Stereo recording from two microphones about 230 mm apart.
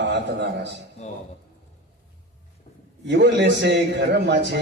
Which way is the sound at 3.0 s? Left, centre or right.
Right.